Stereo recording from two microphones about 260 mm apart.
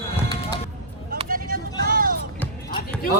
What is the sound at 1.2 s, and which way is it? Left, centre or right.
Vehicle, right.